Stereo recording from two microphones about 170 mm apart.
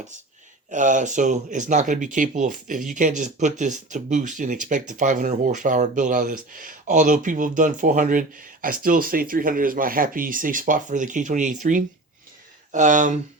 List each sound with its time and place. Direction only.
0.7 s speech: 50° right (ahead or behind)